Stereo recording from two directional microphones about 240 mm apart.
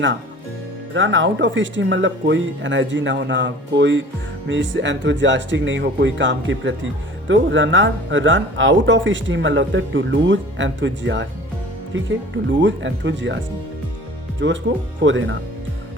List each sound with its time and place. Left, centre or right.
0.9 s speech: right